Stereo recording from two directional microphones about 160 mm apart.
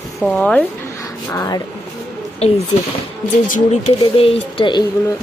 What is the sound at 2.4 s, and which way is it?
Speech, 40° left (ahead or behind).